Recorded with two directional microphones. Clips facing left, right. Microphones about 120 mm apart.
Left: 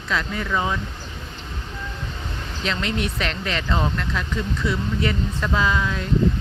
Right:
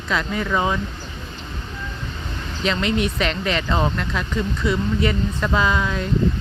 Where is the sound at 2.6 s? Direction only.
5° right (ahead or behind).